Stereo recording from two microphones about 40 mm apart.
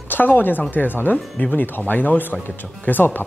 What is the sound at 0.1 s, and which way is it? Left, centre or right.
Speech, left.